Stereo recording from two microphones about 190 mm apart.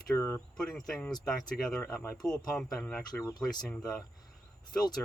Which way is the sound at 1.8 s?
10° left (ahead or behind).